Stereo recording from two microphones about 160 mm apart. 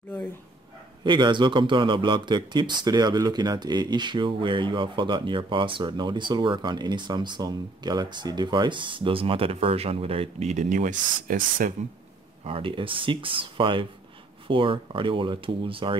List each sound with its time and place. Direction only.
1.0 s speech: 30° right (ahead or behind); by 11.7 s 60° right (ahead or behind)
12.4 s speech: 35° right (ahead or behind)